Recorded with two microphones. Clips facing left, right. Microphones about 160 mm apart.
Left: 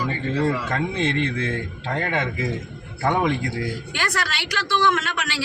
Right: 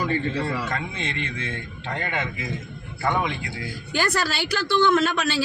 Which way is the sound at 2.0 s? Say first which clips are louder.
Left 5 dB; 35° left (ahead or behind).